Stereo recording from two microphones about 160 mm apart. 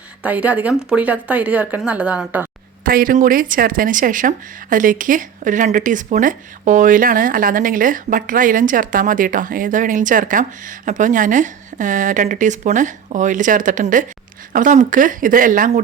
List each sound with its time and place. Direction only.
0.2 s speech: 10° right (ahead or behind)
2.8 s speech: 60° right (ahead or behind)